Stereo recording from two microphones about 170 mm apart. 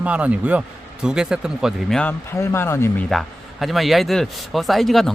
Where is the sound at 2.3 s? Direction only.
15° left (ahead or behind).